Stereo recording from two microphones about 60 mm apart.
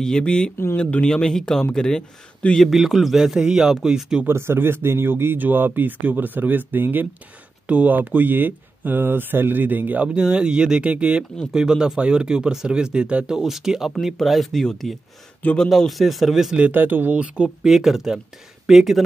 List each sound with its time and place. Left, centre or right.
0.0 s speech: centre
1.1 s speech: centre
2.5 s a man's voice: centre
4.3 s speech: right
7.6 s speech: right
10.0 s a man's voice: centre
16.7 s speech: right
17.6 s a man's voice: centre